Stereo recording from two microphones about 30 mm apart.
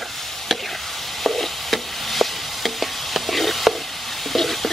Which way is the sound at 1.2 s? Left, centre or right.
Centre.